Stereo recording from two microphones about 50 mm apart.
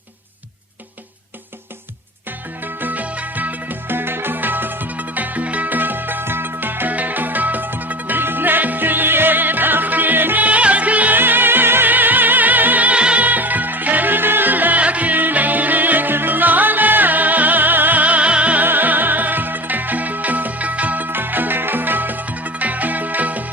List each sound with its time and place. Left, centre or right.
2.8 s music: right
11.2 s music: right
13.2 s music: right
18.6 s music: right